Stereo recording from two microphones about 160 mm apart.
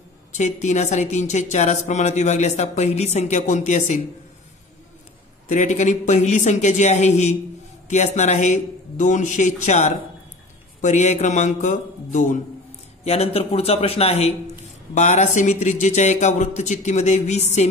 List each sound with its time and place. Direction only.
0.3 s speech: 45° left (ahead or behind)
5.5 s speech: 50° left (ahead or behind)
13.0 s a man's voice: 40° left (ahead or behind)